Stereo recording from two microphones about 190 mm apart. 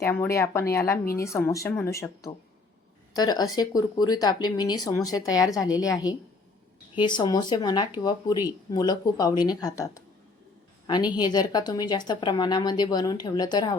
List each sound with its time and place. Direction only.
0.0 s a woman's voice: 15° left (ahead or behind)